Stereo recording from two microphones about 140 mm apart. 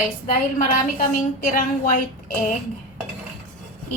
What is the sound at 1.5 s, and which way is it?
Speech, 75° left (ahead or behind).